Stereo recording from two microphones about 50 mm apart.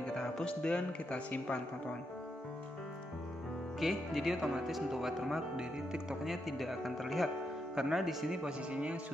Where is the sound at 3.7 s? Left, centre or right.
Centre.